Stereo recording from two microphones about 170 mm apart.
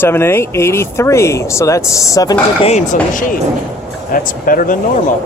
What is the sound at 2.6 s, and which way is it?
Speech, 40° left (ahead or behind).